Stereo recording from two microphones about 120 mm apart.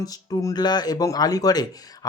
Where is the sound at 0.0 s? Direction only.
35° left (ahead or behind).